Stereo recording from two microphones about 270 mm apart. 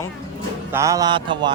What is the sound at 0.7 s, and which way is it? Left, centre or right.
Speech, centre.